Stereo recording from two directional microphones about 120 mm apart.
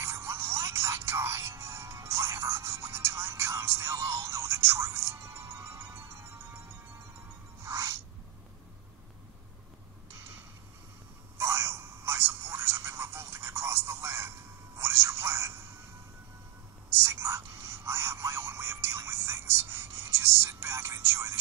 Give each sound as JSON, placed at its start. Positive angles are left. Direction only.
{"t": 0.0, "sound": "music", "side_deg": -20}
{"t": 7.6, "sound": "music", "side_deg": -25}
{"t": 11.3, "sound": "a sound", "side_deg": -20}
{"t": 16.9, "sound": "whispering", "side_deg": -20}